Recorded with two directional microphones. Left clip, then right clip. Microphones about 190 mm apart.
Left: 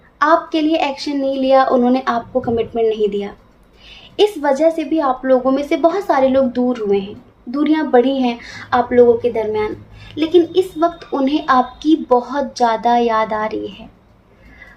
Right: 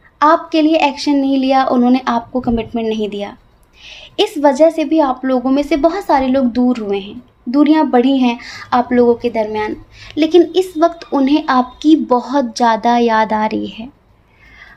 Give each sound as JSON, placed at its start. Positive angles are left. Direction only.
{"t": 0.2, "sound": "a woman's voice", "side_deg": -45}